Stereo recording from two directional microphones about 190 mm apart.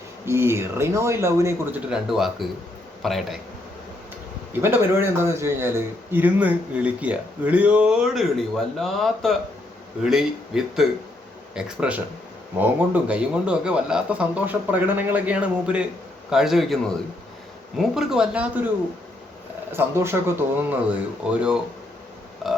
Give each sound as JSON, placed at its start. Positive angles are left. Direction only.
{"t": 0.3, "sound": "speech", "side_deg": -15}
{"t": 2.0, "sound": "speech", "side_deg": 0}
{"t": 4.6, "sound": "speech", "side_deg": -10}
{"t": 19.7, "sound": "speech", "side_deg": -15}